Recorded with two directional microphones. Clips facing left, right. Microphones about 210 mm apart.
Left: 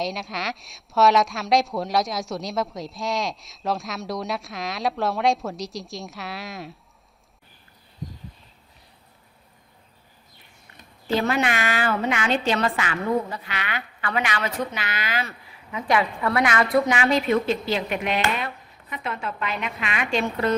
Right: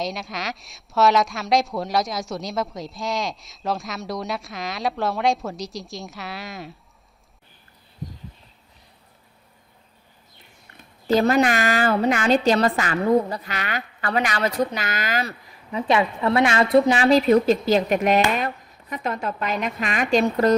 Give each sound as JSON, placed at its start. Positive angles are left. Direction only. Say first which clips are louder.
{"t": 0.0, "sound": "a woman's voice", "louder": "even", "side_deg": 0}
{"t": 11.1, "sound": "a woman's voice", "louder": "right 5 dB", "side_deg": -40}
{"t": 15.9, "sound": "a woman's voice", "louder": "right 2 dB", "side_deg": -25}